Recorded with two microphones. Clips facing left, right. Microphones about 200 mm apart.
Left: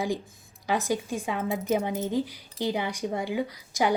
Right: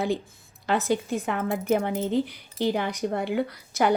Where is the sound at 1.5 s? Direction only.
55° right (ahead or behind).